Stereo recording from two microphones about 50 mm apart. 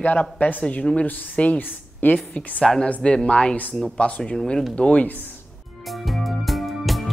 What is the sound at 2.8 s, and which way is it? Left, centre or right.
Speech, left.